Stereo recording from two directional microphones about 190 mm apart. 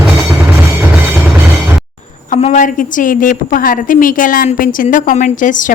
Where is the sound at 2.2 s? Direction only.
40° left (ahead or behind).